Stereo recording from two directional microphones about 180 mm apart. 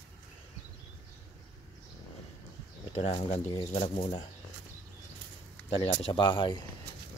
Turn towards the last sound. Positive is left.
turn(degrees=25)  # may be behind; listen again after turning